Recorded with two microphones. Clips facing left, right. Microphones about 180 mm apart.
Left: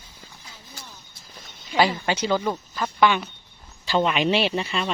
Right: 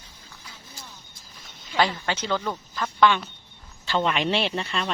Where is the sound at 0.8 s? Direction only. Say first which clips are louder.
Left 1 dB; 70° left (ahead or behind).